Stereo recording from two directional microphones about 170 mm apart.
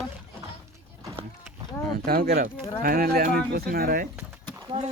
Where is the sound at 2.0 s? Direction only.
65° right (ahead or behind).